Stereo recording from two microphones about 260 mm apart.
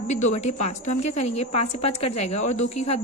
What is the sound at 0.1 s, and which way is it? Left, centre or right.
A woman's voice, left.